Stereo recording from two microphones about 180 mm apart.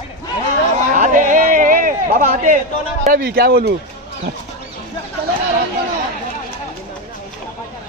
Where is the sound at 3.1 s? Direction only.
60° right (ahead or behind).